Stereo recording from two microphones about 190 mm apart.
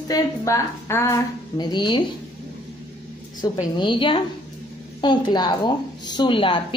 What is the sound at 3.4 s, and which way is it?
A woman's voice, 25° left (ahead or behind).